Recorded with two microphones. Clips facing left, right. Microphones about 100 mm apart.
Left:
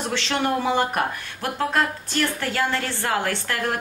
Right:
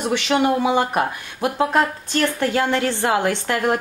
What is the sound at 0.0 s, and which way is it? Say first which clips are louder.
A woman's voice: right 5 dB; 15° right (ahead or behind).